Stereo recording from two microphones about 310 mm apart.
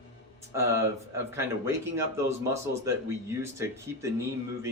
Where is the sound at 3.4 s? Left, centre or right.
Centre.